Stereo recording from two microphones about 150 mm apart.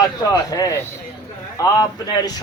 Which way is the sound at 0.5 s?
20° left (ahead or behind).